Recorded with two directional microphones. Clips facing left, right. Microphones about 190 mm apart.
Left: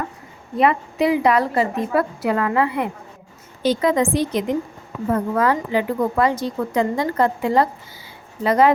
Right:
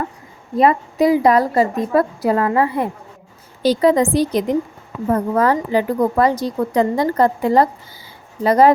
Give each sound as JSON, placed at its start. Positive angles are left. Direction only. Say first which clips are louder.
{"t": 0.5, "sound": "a woman's voice", "louder": "right 3 dB", "side_deg": -35}